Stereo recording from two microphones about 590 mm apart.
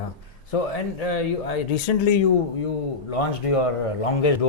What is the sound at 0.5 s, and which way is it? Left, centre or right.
Speech, left.